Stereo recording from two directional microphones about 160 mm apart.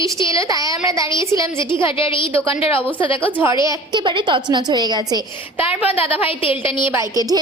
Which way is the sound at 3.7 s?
30° right (ahead or behind).